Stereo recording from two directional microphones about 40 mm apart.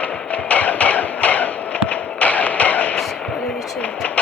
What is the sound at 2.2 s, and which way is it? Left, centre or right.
Music, left.